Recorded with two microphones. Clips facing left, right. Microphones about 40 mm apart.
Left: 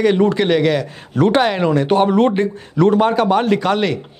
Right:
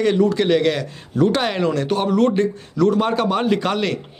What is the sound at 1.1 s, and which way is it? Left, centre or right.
Speech, left.